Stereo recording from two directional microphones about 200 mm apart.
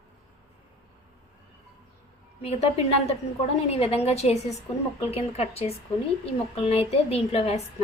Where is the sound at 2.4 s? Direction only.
30° left (ahead or behind).